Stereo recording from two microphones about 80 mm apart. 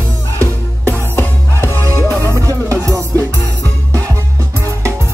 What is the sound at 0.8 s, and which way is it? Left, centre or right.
Music, left.